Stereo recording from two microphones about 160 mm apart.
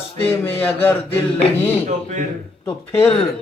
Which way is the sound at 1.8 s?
45° right (ahead or behind).